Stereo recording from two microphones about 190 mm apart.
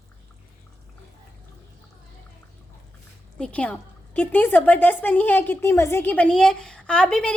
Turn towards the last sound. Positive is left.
turn(degrees=5)  # may be behind; listen again after turning